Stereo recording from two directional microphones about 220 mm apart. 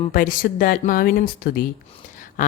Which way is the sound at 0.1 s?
40° left (ahead or behind).